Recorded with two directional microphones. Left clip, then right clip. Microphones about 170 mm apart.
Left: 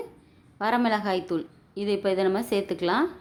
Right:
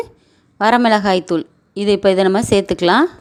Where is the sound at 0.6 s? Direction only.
45° right (ahead or behind).